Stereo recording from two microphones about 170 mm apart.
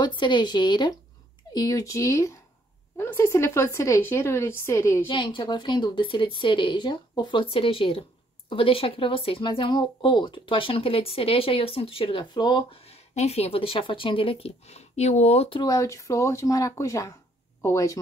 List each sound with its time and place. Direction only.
0.0 s a woman's voice: 25° left (ahead or behind)
5.0 s a woman's voice: 30° left (ahead or behind)
15.6 s speech: 20° left (ahead or behind)